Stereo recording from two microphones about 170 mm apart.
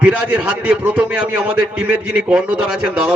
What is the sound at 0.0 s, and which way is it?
A man's voice, 5° right (ahead or behind).